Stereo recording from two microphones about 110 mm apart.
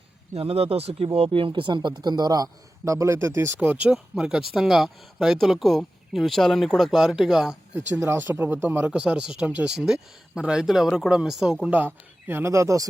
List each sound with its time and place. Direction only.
0.3 s speech: 60° right (ahead or behind); by 7.8 s 5° right (ahead or behind)
7.9 s speech: 20° right (ahead or behind)
8.9 s speech: 10° right (ahead or behind)
12.3 s speech: 25° right (ahead or behind)